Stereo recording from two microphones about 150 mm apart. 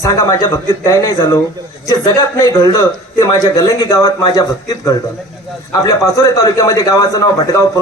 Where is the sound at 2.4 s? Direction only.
25° left (ahead or behind).